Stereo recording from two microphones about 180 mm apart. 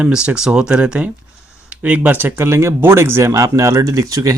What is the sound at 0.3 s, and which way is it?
Speech, 5° right (ahead or behind).